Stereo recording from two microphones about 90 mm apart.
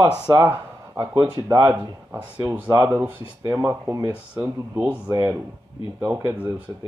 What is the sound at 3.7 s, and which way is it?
Speech, 25° right (ahead or behind).